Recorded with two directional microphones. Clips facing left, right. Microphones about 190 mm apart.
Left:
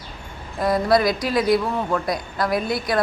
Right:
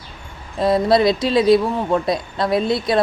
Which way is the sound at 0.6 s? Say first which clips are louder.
Right 3 dB; 25° right (ahead or behind).